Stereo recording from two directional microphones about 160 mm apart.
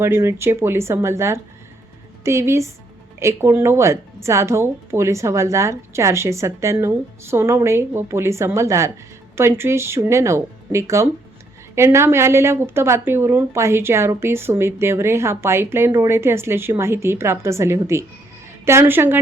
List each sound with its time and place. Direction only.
0.0 s speech: 15° right (ahead or behind)